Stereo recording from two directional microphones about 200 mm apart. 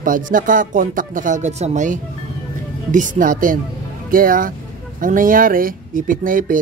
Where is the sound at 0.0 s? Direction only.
40° right (ahead or behind).